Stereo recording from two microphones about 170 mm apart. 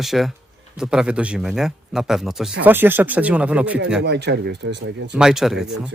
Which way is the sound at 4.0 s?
80° right.